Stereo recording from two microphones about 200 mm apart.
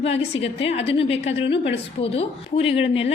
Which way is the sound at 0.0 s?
30° left (ahead or behind).